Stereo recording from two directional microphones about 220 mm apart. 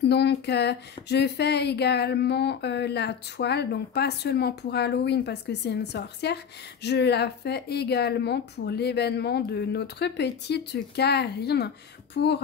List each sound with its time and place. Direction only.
0.0 s speech: 50° left (ahead or behind)